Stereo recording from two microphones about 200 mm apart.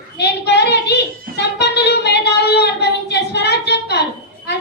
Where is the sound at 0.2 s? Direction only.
60° left (ahead or behind).